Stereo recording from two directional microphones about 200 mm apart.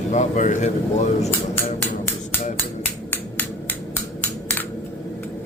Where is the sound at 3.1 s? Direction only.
10° left (ahead or behind).